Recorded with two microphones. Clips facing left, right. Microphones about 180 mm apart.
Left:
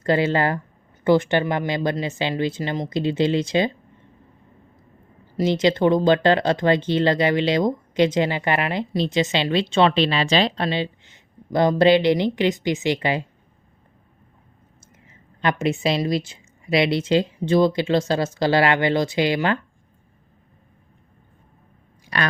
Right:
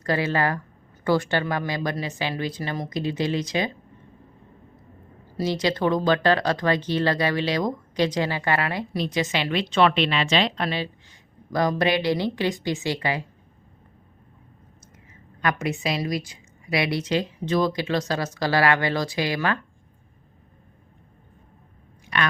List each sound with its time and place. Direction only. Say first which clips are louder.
0.0 s speech: left 4 dB; 25° left (ahead or behind)
5.4 s speech: left 5 dB; 25° left (ahead or behind)
15.4 s speech: left 4 dB; 25° left (ahead or behind)
22.0 s a sound: left 1 dB; 35° left (ahead or behind)